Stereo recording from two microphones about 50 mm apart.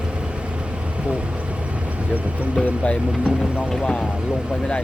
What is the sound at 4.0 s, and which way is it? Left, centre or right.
Speech, centre.